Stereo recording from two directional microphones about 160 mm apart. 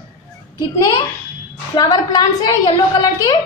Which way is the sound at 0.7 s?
25° left (ahead or behind).